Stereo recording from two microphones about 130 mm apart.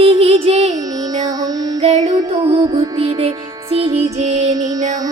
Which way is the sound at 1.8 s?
55° right (ahead or behind).